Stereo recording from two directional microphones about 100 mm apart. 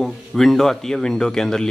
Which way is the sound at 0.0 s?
Centre (ahead or behind).